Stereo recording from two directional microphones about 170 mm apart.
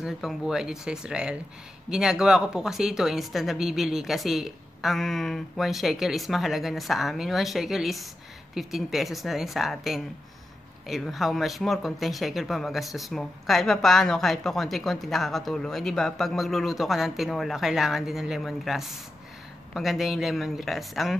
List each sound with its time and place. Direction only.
0.0 s speech: centre (ahead or behind)